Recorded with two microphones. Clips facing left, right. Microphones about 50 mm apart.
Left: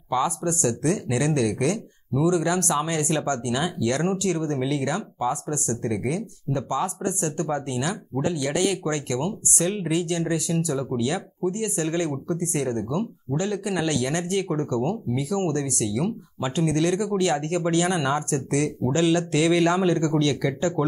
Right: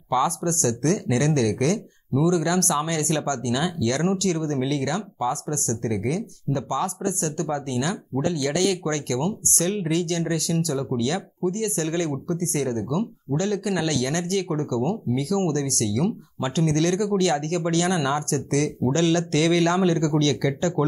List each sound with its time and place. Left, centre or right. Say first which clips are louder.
0.1 s speech: right 2 dB; centre